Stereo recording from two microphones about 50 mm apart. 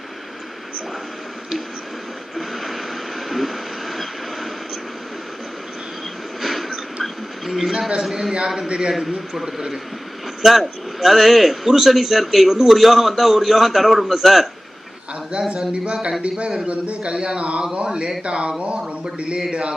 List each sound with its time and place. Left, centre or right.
2.3 s vehicle: centre
6.4 s a sound: centre
7.7 s a man's voice: centre
15.3 s a man's voice: centre